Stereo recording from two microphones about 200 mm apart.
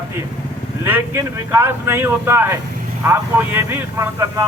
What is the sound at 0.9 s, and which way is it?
A man's voice, 10° right (ahead or behind).